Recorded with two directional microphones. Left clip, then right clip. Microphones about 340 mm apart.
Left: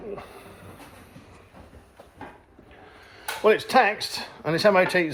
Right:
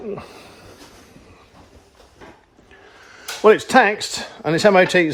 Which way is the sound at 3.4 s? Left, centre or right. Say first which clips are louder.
Right 6 dB; right.